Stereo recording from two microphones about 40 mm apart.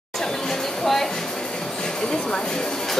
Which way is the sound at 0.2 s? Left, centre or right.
Centre.